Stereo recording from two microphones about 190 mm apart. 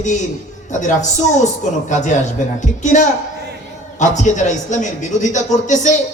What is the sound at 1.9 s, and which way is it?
Speech, 40° left (ahead or behind).